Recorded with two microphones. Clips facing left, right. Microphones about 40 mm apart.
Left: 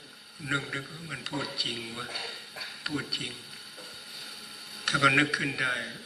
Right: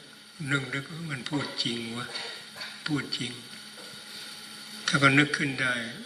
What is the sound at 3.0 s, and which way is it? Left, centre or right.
Speech, centre.